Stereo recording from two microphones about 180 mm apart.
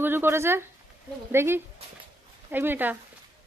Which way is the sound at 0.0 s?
10° right (ahead or behind).